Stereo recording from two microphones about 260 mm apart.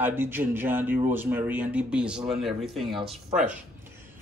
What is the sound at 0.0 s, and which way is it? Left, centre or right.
Speech, centre.